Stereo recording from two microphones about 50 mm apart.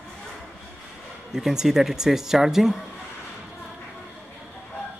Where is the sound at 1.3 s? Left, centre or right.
Centre.